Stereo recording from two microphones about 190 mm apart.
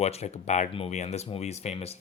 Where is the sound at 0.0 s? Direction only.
35° left (ahead or behind).